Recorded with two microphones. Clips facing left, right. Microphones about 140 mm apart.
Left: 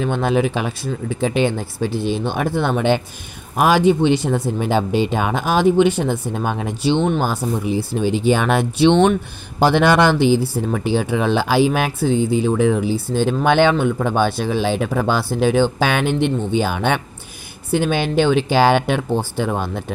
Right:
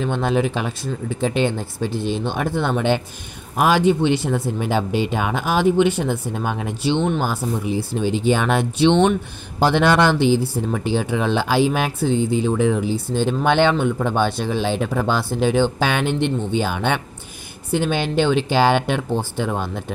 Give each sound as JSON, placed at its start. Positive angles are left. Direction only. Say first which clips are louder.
{"t": 0.0, "sound": "speech", "louder": "left 2 dB", "side_deg": 10}